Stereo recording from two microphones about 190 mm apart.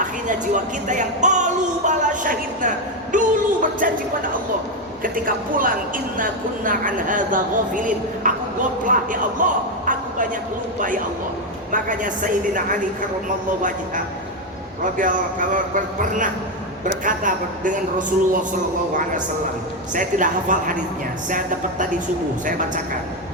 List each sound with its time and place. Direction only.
0.0 s music: 40° right (ahead or behind)
5.0 s speech: 45° right (ahead or behind)
9.4 s a sound: 45° right (ahead or behind)
10.8 s speech: 45° right (ahead or behind)
19.9 s speech: 45° right (ahead or behind)